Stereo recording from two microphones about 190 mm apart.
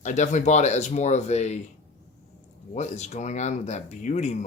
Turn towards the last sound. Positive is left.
turn(degrees=40)  # may be behind; listen again after turning